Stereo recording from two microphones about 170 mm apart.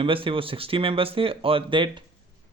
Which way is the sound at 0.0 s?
30° right (ahead or behind).